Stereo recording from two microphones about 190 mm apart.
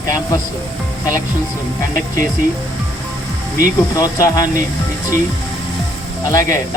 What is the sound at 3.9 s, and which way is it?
Speech, 20° left (ahead or behind).